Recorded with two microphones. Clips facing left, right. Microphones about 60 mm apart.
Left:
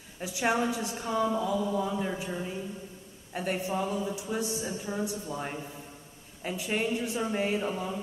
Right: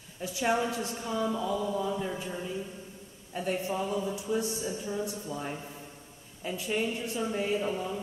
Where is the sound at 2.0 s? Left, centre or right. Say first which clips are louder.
Left 2 dB; left.